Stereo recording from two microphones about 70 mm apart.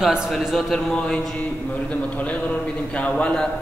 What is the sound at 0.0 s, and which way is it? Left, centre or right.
Speech, centre.